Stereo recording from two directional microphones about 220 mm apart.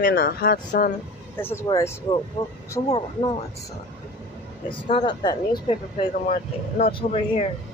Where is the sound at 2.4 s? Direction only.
25° left (ahead or behind).